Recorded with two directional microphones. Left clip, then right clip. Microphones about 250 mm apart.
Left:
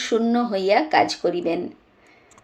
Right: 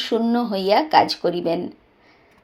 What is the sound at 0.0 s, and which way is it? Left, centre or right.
Speech, centre.